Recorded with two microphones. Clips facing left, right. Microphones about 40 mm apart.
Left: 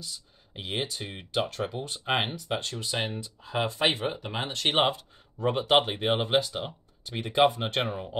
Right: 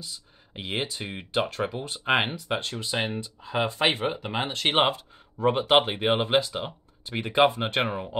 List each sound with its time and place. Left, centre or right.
0.6 s speech: right
2.7 s speech: centre
4.4 s speech: right